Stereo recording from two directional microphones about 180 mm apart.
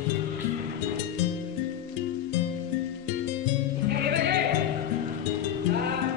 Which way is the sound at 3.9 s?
65° right (ahead or behind).